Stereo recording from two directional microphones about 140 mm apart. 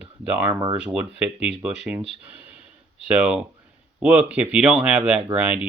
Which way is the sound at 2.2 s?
10° right (ahead or behind).